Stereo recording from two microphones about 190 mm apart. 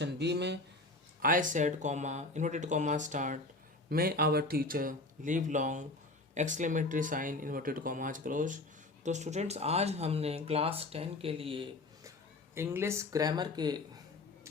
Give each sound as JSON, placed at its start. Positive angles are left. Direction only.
{"t": 0.0, "sound": "speech", "side_deg": -65}
{"t": 1.2, "sound": "speech", "side_deg": -45}
{"t": 3.8, "sound": "speech", "side_deg": -50}
{"t": 12.5, "sound": "speech", "side_deg": -15}